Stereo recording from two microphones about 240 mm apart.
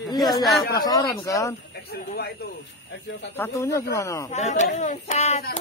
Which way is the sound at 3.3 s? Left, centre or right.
Centre.